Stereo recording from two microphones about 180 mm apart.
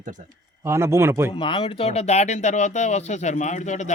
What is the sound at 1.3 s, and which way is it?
Speech, 30° left (ahead or behind).